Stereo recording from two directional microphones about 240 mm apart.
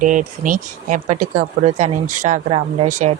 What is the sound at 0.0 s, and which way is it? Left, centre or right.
Speech, right.